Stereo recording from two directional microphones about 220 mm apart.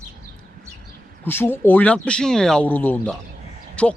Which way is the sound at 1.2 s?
10° left (ahead or behind).